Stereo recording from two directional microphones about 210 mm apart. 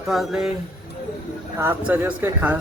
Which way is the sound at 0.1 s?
Centre (ahead or behind).